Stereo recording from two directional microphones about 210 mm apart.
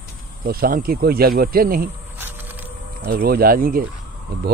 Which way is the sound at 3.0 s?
45° right (ahead or behind).